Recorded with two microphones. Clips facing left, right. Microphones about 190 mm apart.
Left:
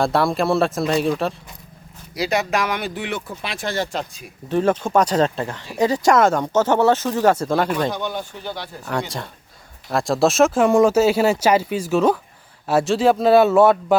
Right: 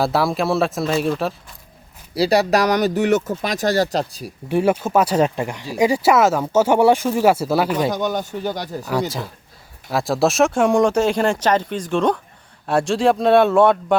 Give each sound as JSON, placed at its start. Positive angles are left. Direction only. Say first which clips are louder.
{"t": 0.0, "sound": "speech", "louder": "even", "side_deg": 0}
{"t": 2.1, "sound": "speech", "louder": "right 5 dB", "side_deg": -35}
{"t": 4.4, "sound": "speech", "louder": "right 1 dB", "side_deg": -10}
{"t": 7.9, "sound": "speech", "louder": "right 5 dB", "side_deg": -45}
{"t": 8.8, "sound": "speech", "louder": "right 2 dB", "side_deg": -5}